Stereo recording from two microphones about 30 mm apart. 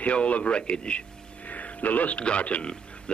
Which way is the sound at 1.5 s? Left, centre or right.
Left.